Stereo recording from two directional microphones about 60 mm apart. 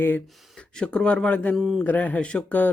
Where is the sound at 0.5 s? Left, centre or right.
Centre.